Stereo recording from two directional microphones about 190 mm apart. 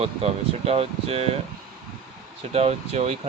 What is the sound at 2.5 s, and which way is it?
Speech, 35° right (ahead or behind).